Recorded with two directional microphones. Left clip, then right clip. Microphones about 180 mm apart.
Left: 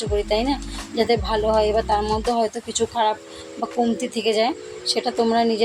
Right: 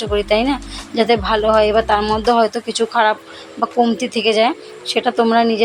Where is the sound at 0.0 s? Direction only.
10° right (ahead or behind).